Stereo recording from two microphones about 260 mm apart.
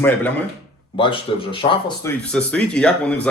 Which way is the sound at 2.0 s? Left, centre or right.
Centre.